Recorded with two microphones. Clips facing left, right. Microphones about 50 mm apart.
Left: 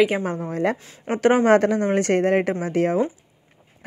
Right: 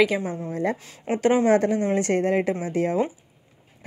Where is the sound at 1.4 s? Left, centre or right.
Left.